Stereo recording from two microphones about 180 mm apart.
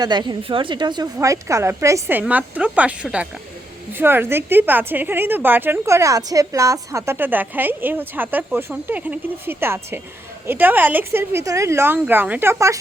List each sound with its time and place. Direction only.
0.0 s a woman's voice: 25° right (ahead or behind)